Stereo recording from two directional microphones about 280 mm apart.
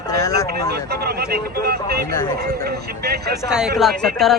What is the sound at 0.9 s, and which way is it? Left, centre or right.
Speech, right.